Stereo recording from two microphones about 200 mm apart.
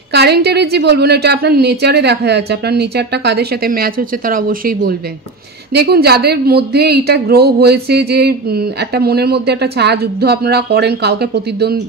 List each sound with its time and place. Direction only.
0.1 s a woman's voice: 55° right (ahead or behind)